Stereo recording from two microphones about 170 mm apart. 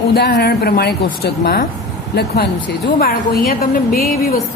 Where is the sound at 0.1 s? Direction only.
65° left (ahead or behind).